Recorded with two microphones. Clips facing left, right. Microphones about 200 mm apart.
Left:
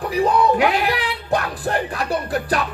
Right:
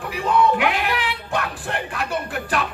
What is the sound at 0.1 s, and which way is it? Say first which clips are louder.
Speech: left 2 dB; 35° left (ahead or behind).